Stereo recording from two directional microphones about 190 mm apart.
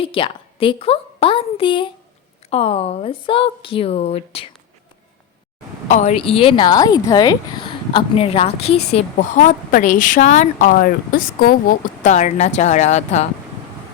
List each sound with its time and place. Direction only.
0.0 s a woman's voice: 30° left (ahead or behind)
5.9 s a woman's voice: 40° left (ahead or behind)
12.0 s a woman's voice: 40° left (ahead or behind)